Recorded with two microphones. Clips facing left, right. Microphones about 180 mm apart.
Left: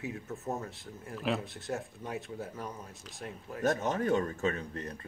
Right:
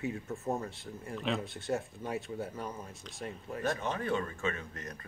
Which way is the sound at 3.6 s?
40° left (ahead or behind).